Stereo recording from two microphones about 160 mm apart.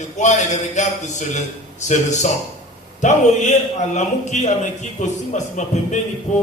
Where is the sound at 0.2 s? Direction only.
50° left (ahead or behind).